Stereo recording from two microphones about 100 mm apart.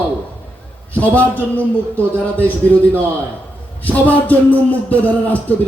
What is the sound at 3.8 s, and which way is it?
A man's voice, 15° left (ahead or behind).